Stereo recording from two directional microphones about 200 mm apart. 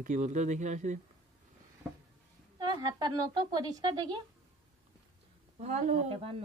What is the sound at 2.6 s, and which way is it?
A woman's voice, 20° right (ahead or behind).